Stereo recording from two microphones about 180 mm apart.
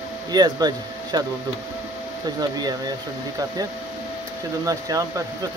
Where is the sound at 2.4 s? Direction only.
20° right (ahead or behind).